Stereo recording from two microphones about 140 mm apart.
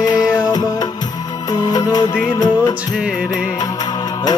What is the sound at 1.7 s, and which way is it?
Music, 25° left (ahead or behind).